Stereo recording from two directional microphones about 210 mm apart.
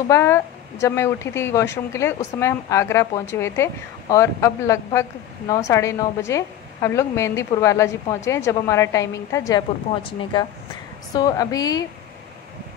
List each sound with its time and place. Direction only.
0.1 s speech: 15° left (ahead or behind)
11.1 s speech: 15° left (ahead or behind)